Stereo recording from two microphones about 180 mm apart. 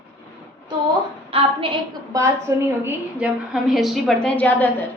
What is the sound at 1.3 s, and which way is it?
Speech, 30° right (ahead or behind).